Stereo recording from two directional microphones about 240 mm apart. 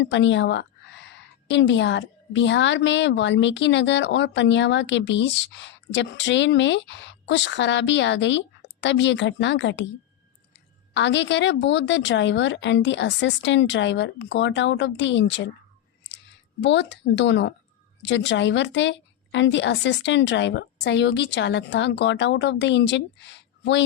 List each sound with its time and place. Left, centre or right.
0.0 s a woman's voice: left
10.9 s a woman's voice: left